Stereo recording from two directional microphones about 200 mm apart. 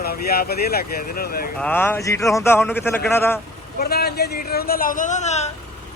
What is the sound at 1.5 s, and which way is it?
A man's voice, 10° left (ahead or behind).